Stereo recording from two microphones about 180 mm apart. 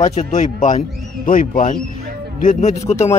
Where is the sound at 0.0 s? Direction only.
40° left (ahead or behind).